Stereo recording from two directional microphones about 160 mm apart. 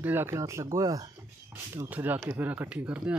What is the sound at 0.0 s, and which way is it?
Speech, 15° right (ahead or behind).